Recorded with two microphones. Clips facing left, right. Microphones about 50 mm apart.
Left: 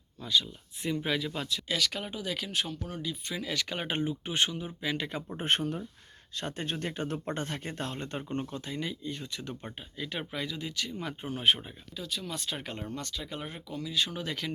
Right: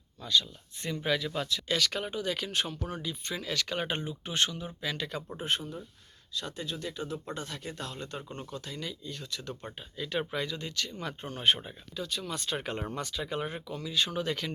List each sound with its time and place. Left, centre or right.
0.2 s speech: centre
5.4 s speech: left; by 9.7 s centre
10.0 s speech: centre